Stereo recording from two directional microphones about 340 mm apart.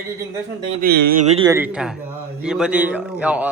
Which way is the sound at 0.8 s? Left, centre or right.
Right.